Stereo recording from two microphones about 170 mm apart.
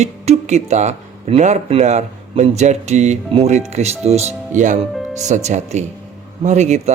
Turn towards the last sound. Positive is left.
turn(degrees=-40)  # may be behind; listen again after turning